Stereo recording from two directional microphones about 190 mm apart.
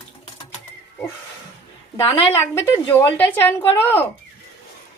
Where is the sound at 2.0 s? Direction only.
15° left (ahead or behind).